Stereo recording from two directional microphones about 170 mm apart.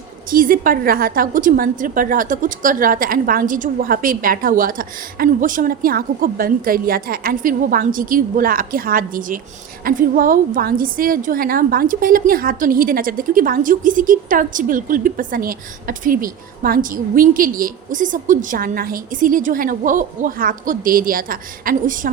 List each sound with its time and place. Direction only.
0.3 s a woman's voice: 55° right (ahead or behind)